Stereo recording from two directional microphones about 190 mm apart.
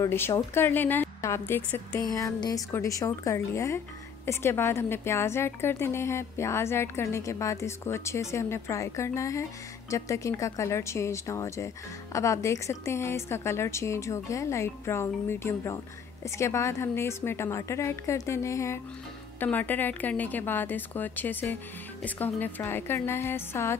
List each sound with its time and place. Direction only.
0.0 s a woman's voice: 15° left (ahead or behind)